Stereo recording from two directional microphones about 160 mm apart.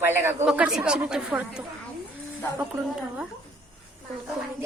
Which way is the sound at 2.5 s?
10° right (ahead or behind).